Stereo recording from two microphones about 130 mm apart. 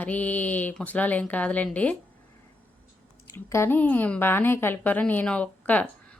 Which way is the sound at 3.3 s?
20° left (ahead or behind).